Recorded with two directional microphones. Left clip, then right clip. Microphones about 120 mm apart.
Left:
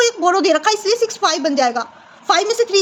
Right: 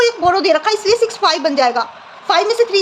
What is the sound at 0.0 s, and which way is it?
A woman's voice, 60° left (ahead or behind).